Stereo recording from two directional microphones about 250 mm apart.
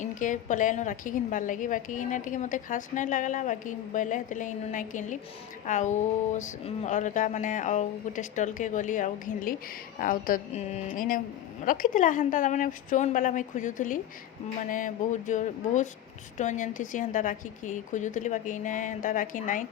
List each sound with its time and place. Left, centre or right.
0.0 s a woman's voice: left